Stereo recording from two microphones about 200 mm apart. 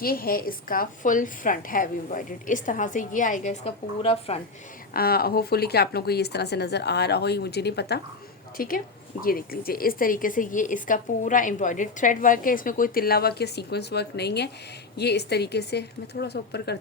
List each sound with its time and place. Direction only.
0.0 s a woman's voice: 45° left (ahead or behind); by 4.4 s 30° left (ahead or behind)
4.9 s a woman's voice: 50° left (ahead or behind)